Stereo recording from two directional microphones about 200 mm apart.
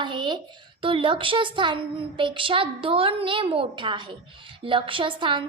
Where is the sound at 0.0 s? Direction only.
25° right (ahead or behind).